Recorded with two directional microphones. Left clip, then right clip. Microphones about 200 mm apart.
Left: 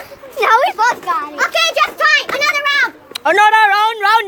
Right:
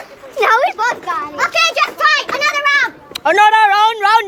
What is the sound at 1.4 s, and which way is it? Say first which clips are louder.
Children playing: right 1 dB; 15° right (ahead or behind).